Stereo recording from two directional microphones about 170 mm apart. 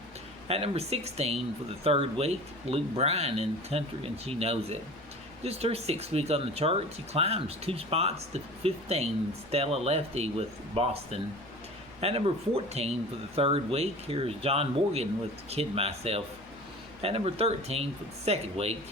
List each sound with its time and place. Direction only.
0.4 s speech: 35° right (ahead or behind)